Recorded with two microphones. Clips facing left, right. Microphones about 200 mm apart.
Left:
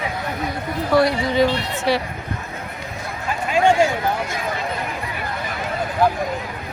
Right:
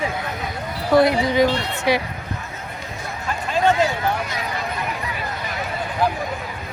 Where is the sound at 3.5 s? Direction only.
10° left (ahead or behind).